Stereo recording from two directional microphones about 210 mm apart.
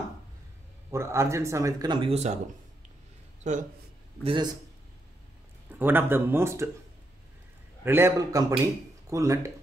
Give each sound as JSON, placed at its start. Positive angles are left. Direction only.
{"t": 0.9, "sound": "speech", "side_deg": -15}
{"t": 3.4, "sound": "a man's voice", "side_deg": -35}
{"t": 5.7, "sound": "speech", "side_deg": -10}
{"t": 7.8, "sound": "speech", "side_deg": -10}